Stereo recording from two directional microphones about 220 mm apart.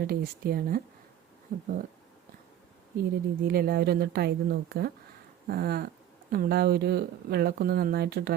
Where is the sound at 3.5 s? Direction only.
45° right (ahead or behind).